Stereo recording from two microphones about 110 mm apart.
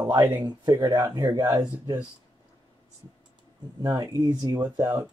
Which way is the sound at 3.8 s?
35° right (ahead or behind).